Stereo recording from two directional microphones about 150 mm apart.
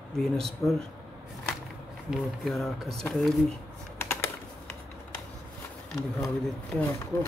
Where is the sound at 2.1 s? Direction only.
Centre (ahead or behind).